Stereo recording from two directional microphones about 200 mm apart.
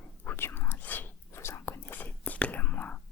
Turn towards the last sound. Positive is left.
turn(degrees=10)  # may be behind; listen again after turning